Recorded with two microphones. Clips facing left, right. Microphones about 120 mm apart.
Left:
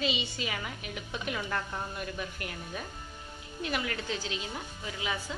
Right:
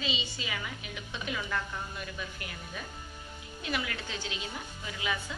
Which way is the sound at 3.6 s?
40° left (ahead or behind).